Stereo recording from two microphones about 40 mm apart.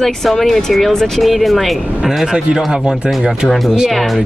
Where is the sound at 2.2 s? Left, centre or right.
Centre.